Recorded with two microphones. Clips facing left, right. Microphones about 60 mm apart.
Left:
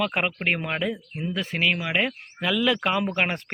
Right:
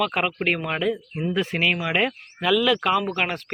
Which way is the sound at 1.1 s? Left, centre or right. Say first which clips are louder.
Right 4 dB; centre.